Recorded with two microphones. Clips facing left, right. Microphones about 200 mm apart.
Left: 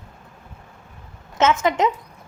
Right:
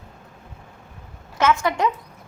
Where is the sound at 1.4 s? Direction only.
20° left (ahead or behind).